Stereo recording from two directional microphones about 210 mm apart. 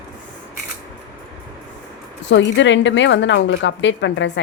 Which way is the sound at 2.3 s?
60° left (ahead or behind).